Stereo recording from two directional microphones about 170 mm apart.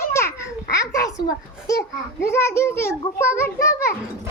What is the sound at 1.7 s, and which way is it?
A child's voice, 15° left (ahead or behind).